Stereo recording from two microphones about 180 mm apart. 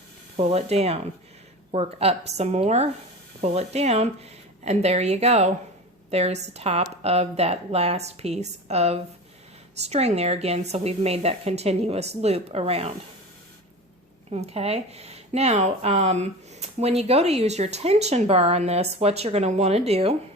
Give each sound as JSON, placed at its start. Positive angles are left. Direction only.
{"t": 0.3, "sound": "speech", "side_deg": -35}
{"t": 14.3, "sound": "speech", "side_deg": -35}